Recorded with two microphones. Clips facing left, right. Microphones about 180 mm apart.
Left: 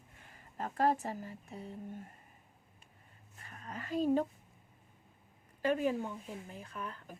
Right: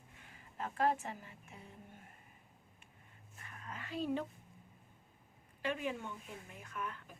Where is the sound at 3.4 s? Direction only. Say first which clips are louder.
Left 4 dB; 35° left (ahead or behind).